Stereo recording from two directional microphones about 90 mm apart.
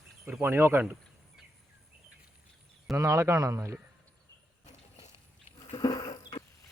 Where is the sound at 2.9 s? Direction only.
35° right (ahead or behind).